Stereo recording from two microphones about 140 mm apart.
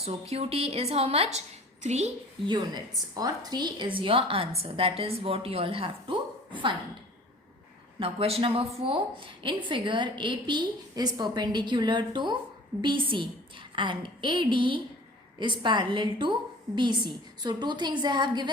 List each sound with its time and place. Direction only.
0.0 s a woman's voice: 50° right (ahead or behind)
2.5 s a woman's voice: 30° right (ahead or behind)
7.9 s a woman's voice: 40° right (ahead or behind)